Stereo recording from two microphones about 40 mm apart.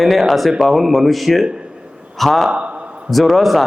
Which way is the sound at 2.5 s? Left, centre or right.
Right.